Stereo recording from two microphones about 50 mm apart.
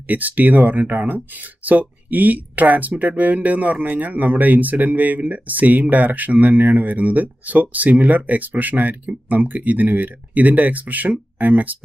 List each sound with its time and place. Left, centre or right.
0.1 s speech: right